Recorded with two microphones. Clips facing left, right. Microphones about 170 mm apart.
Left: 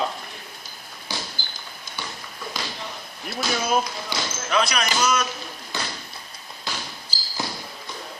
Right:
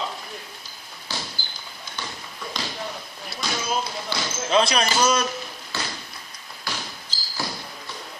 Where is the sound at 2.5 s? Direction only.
5° left (ahead or behind).